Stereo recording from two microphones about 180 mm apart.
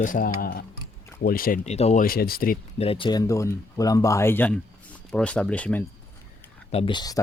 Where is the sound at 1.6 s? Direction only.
35° left (ahead or behind).